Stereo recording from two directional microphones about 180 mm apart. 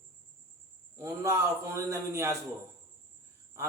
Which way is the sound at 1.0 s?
15° right (ahead or behind).